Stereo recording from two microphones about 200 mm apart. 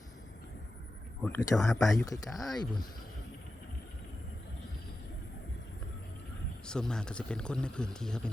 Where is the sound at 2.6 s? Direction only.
20° left (ahead or behind).